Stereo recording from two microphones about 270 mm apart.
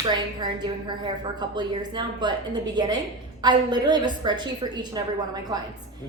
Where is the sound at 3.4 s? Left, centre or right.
Centre.